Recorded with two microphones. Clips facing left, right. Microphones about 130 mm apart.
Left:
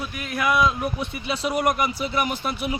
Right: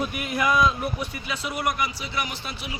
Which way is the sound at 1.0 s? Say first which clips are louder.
Left 4 dB; 30° left (ahead or behind).